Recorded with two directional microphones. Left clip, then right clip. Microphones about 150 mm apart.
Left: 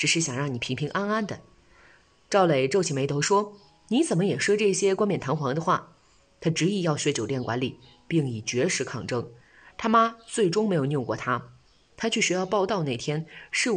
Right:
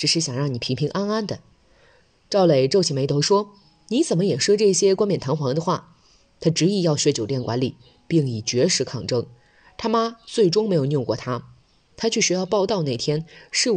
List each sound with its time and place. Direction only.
0.0 s speech: 35° right (ahead or behind)